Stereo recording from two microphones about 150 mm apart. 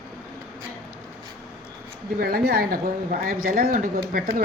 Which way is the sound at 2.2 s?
90° right.